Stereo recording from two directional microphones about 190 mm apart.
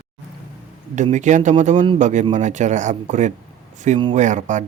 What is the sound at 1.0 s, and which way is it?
Speech, 40° right (ahead or behind).